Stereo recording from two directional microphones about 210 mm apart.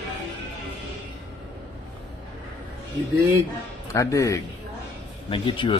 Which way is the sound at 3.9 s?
15° left (ahead or behind).